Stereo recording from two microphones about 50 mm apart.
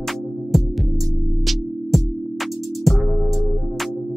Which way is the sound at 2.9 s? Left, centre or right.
Centre.